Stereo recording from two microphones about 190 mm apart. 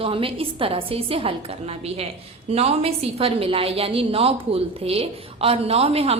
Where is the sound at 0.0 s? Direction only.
30° right (ahead or behind).